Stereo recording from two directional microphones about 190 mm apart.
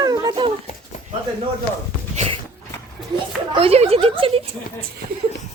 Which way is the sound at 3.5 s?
30° right (ahead or behind).